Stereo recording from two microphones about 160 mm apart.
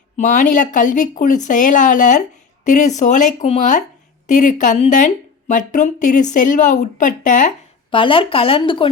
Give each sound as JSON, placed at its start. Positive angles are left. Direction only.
{"t": 0.2, "sound": "speech", "side_deg": 55}
{"t": 7.9, "sound": "speech", "side_deg": 35}